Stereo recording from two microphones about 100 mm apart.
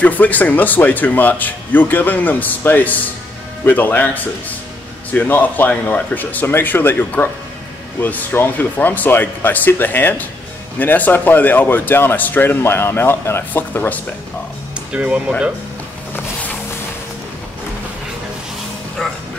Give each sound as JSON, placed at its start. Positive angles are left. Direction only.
{"t": 0.0, "sound": "speech", "side_deg": 15}
{"t": 14.9, "sound": "speech", "side_deg": -10}